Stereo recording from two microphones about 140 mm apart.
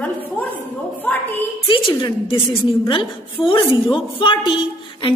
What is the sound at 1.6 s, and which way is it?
A woman's voice, 35° left (ahead or behind).